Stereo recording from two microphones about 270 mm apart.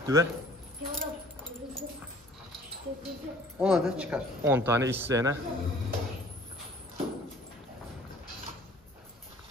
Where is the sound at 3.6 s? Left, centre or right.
Centre.